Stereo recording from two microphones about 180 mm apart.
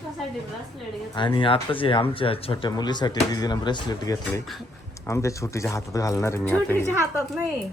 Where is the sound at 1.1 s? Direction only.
25° left (ahead or behind).